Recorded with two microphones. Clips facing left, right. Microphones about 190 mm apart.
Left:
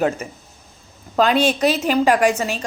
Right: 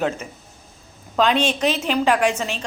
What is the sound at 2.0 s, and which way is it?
Speech, 40° left (ahead or behind).